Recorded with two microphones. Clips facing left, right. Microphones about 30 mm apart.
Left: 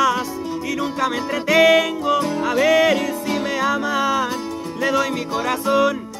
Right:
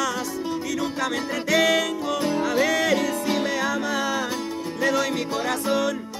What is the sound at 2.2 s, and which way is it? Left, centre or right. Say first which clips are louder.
Music: left 2 dB; centre.